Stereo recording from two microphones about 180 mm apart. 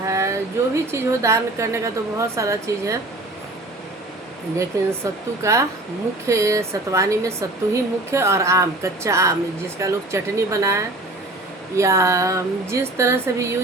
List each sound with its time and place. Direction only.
0.0 s a sound: 15° right (ahead or behind)
0.9 s speech: 15° right (ahead or behind)
4.5 s speech: 15° right (ahead or behind)